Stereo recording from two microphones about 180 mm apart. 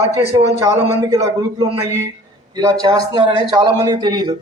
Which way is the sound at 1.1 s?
20° right (ahead or behind).